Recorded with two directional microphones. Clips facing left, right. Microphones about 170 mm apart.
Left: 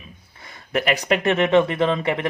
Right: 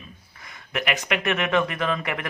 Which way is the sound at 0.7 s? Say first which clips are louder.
Left 6 dB; 35° left (ahead or behind).